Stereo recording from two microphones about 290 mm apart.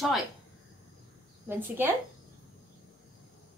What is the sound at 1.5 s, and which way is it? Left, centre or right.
Speech, centre.